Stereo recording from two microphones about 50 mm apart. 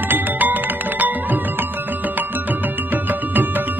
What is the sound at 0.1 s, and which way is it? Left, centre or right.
Music, right.